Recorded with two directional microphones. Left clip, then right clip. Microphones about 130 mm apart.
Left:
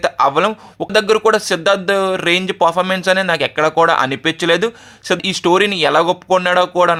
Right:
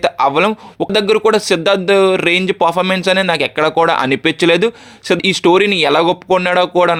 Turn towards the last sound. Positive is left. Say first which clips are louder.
# right 1 dB
turn(degrees=-25)  # may be behind; listen again after turning